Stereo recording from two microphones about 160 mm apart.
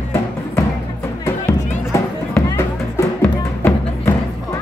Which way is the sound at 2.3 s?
15° left (ahead or behind).